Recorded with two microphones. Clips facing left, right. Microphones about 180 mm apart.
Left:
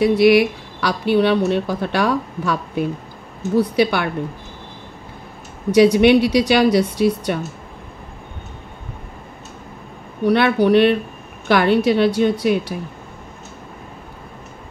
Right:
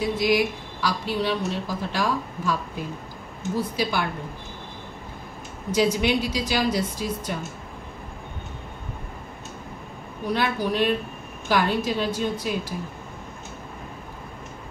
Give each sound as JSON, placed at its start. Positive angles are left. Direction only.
{"t": 0.0, "sound": "a woman's voice", "side_deg": 70}
{"t": 5.7, "sound": "a woman's voice", "side_deg": 70}
{"t": 10.2, "sound": "a woman's voice", "side_deg": 70}